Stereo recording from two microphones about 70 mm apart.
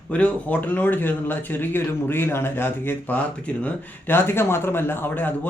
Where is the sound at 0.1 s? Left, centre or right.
Left.